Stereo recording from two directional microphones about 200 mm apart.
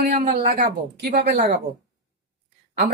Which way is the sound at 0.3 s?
40° right (ahead or behind).